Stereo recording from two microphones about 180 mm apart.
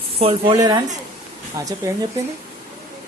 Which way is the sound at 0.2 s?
30° right (ahead or behind).